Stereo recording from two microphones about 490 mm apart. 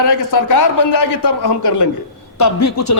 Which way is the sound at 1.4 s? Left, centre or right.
Left.